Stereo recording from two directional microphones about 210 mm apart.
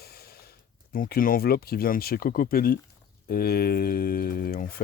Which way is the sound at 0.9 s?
45° left (ahead or behind).